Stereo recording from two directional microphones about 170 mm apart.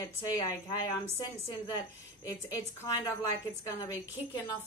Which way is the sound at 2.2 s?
20° left (ahead or behind).